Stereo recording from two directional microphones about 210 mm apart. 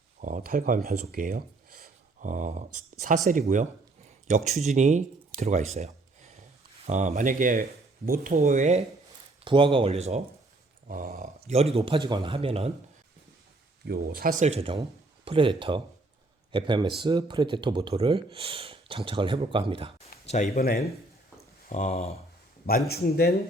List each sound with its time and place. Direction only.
0.2 s speech: 40° right (ahead or behind)
1.1 s a sound: 45° right (ahead or behind)
3.4 s speech: 35° right (ahead or behind)
9.4 s speech: 25° right (ahead or behind)
13.8 s speech: 45° right (ahead or behind); by 19.9 s 25° right (ahead or behind)
20.2 s speech: 35° left (ahead or behind)
21.7 s speech: 35° left (ahead or behind)
22.9 s speech: 45° left (ahead or behind)